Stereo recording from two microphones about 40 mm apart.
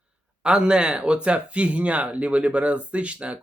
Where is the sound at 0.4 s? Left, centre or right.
Right.